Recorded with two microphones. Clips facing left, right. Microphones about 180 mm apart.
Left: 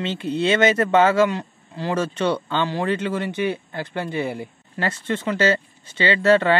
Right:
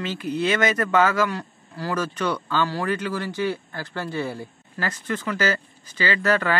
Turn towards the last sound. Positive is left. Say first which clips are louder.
# left 5 dB
turn(degrees=25)  # may be behind; listen again after turning